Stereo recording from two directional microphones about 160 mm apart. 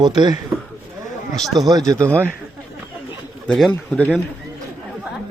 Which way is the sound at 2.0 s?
15° right (ahead or behind).